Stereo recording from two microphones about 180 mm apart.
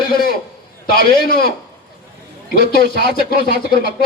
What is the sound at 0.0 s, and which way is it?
A man's voice, 55° left (ahead or behind).